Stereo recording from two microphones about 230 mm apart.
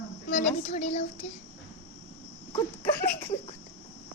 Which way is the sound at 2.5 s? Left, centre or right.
Left.